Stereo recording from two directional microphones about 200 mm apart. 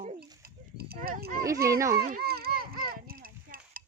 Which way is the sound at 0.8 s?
50° right (ahead or behind).